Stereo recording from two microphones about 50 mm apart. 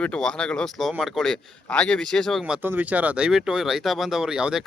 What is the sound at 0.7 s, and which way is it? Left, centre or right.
Speech, centre.